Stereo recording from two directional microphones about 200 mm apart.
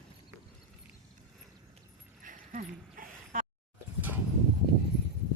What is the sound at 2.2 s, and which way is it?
Dog, 40° right (ahead or behind).